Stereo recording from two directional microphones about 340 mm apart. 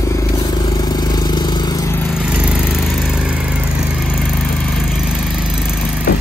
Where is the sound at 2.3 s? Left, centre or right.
Centre.